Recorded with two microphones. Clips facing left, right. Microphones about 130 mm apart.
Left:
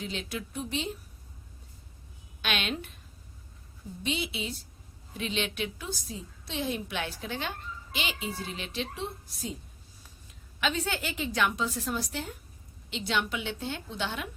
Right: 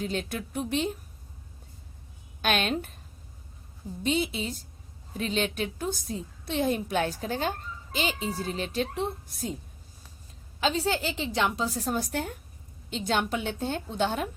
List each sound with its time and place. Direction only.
0.0 s a woman's voice: 50° right (ahead or behind)
2.4 s a woman's voice: 45° right (ahead or behind)
4.0 s a woman's voice: 45° right (ahead or behind)
10.6 s a woman's voice: 30° right (ahead or behind)